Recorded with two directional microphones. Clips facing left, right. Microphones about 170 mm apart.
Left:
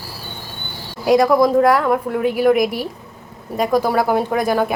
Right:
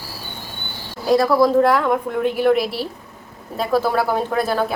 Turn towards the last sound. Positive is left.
turn(degrees=15)  # may be behind; listen again after turning